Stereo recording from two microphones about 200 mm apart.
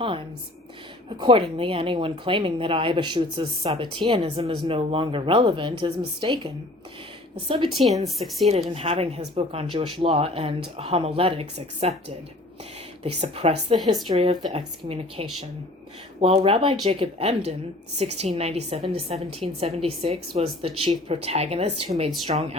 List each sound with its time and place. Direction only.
1.2 s speech: 25° right (ahead or behind)
7.7 s speech: centre (ahead or behind)
8.4 s a woman's voice: 30° right (ahead or behind)